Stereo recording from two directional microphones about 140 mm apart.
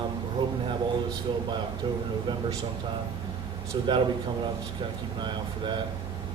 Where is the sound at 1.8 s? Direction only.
30° right (ahead or behind).